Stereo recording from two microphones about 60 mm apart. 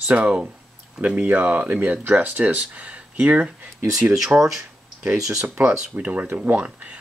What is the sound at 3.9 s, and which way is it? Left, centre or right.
Speech, centre.